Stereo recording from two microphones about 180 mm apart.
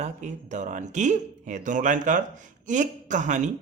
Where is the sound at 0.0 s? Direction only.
40° right (ahead or behind).